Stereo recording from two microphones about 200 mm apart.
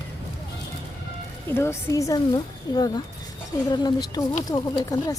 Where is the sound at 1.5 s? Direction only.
10° left (ahead or behind).